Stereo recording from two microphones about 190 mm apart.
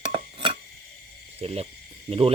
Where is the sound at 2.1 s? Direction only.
30° right (ahead or behind).